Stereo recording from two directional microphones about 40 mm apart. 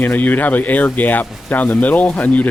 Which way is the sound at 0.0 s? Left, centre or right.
Left.